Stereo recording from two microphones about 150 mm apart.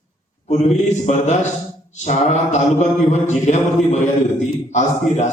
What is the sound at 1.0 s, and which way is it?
Mantra, 50° left (ahead or behind).